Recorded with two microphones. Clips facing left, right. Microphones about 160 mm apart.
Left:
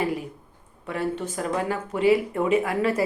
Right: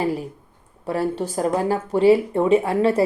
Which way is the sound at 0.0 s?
30° right (ahead or behind).